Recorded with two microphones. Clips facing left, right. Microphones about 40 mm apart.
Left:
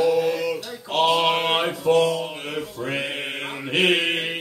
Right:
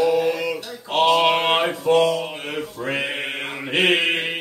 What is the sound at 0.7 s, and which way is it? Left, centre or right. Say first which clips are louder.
Mantra: right 3 dB; centre.